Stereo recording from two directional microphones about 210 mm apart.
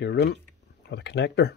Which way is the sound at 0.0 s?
55° left (ahead or behind).